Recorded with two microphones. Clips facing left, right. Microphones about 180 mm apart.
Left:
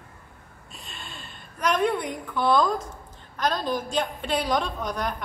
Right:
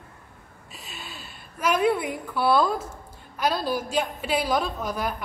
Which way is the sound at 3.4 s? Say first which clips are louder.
Right 1 dB; 10° right (ahead or behind).